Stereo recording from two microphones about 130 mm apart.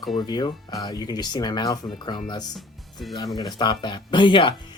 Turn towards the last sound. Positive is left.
turn(degrees=40)  # may be behind; listen again after turning